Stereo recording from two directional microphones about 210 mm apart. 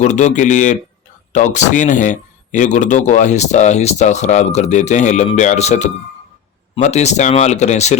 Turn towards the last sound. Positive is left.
turn(degrees=35)  # may be behind; listen again after turning